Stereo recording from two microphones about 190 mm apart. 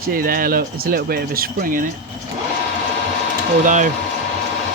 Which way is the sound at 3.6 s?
45° right (ahead or behind).